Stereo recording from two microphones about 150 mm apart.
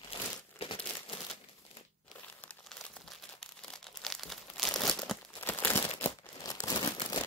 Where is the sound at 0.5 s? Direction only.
40° left (ahead or behind).